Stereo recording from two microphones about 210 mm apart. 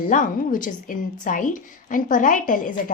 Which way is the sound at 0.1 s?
40° left (ahead or behind).